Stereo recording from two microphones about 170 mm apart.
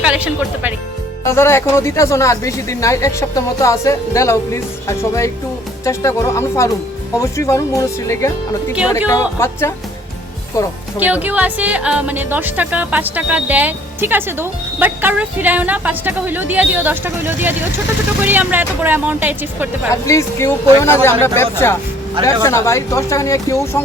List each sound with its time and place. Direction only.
0.0 s speech: 10° right (ahead or behind)
1.2 s speech: 15° left (ahead or behind)
10.9 s speech: 10° right (ahead or behind)
19.9 s speech: 15° left (ahead or behind)